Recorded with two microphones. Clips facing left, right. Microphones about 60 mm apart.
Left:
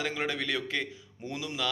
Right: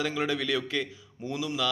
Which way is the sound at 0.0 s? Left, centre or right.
Left.